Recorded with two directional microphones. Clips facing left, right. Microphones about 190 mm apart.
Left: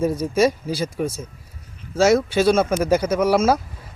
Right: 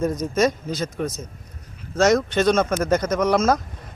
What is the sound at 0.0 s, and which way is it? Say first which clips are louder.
A man's voice: left 2 dB; 10° left (ahead or behind).